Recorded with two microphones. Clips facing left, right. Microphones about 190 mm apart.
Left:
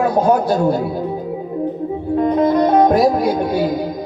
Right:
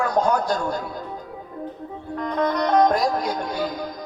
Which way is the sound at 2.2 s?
25° left (ahead or behind).